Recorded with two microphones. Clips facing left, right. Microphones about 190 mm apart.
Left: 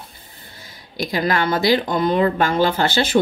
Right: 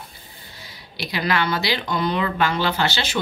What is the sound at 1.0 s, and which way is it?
Speech, 45° left (ahead or behind).